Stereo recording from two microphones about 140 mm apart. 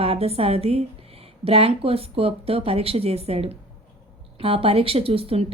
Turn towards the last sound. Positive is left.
turn(degrees=-45)  # may be behind; listen again after turning